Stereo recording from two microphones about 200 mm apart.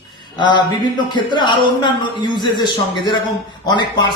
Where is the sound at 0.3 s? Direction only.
25° left (ahead or behind).